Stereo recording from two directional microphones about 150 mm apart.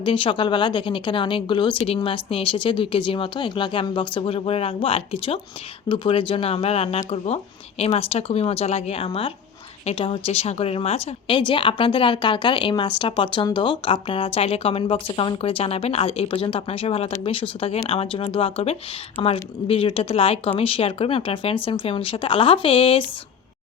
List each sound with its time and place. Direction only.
0.0 s a woman's voice: 35° left (ahead or behind)